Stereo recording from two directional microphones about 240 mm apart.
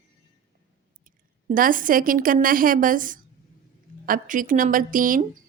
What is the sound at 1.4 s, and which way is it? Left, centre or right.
Speech, right.